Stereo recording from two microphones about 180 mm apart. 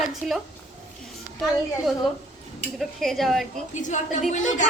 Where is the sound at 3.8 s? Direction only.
45° left (ahead or behind).